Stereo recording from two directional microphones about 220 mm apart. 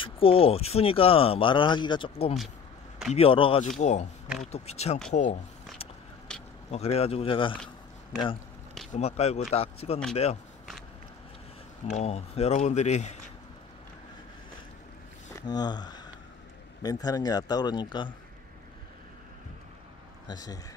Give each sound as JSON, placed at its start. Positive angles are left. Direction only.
{"t": 0.0, "sound": "speech", "side_deg": 25}
{"t": 6.7, "sound": "speech", "side_deg": 30}
{"t": 8.9, "sound": "speech", "side_deg": 30}
{"t": 11.9, "sound": "speech", "side_deg": 30}
{"t": 15.3, "sound": "speech", "side_deg": 20}
{"t": 20.2, "sound": "speech", "side_deg": 15}